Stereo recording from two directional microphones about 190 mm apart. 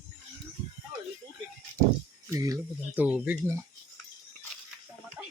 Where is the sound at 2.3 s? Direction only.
20° right (ahead or behind).